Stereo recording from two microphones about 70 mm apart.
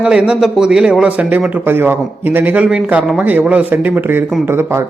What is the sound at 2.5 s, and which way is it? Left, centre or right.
A man's voice, centre.